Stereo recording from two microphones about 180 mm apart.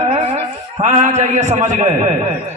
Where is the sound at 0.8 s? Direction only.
40° right (ahead or behind).